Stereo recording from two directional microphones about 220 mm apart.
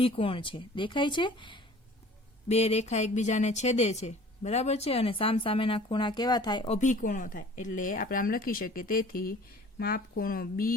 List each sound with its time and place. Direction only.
0.0 s a woman's voice: 25° left (ahead or behind)
6.7 s speech: 35° left (ahead or behind)